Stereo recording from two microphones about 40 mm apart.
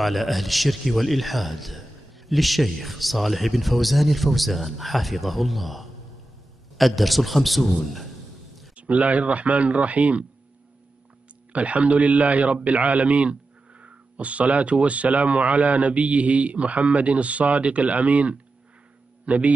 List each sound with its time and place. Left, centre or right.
0.0 s speech: centre
8.7 s a man's voice: right
11.5 s a man's voice: right